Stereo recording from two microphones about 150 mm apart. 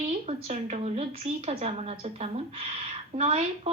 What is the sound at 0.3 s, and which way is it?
A woman's voice, 45° right (ahead or behind).